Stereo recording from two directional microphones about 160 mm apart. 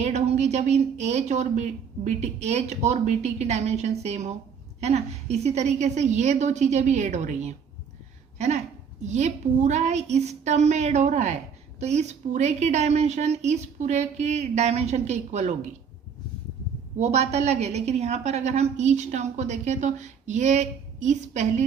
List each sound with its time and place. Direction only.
0.0 s a woman's voice: 45° right (ahead or behind)
17.0 s a woman's voice: 45° right (ahead or behind)